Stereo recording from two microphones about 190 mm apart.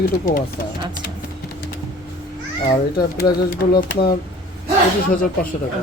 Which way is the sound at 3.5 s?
55° left (ahead or behind).